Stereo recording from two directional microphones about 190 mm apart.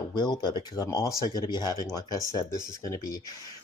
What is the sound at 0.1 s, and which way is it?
Speech, 20° left (ahead or behind).